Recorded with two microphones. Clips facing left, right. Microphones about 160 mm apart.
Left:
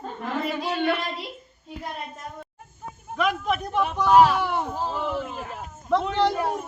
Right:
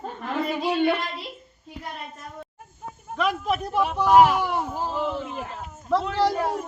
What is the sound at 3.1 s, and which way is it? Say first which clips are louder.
A man's voice: even; centre (ahead or behind).